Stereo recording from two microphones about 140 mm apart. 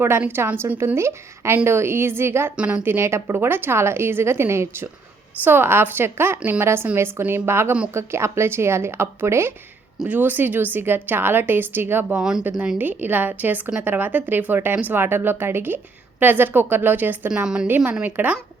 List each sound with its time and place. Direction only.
0.0 s a woman's voice: 15° right (ahead or behind)